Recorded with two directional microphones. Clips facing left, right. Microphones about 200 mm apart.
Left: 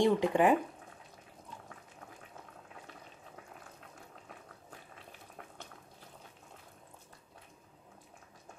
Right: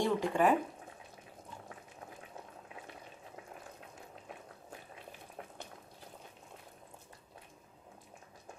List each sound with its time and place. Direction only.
0.0 s speech: 15° left (ahead or behind)